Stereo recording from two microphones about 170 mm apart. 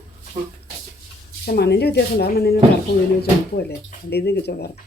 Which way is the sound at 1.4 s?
70° left (ahead or behind).